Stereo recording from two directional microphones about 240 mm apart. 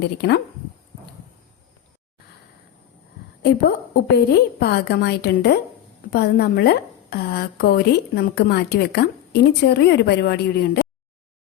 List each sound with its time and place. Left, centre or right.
0.2 s speech: left
3.9 s a woman's voice: left